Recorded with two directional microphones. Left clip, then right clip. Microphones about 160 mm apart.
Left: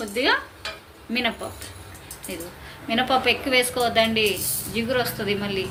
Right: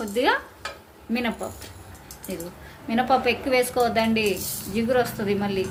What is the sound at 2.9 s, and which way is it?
A woman's voice, 50° right (ahead or behind).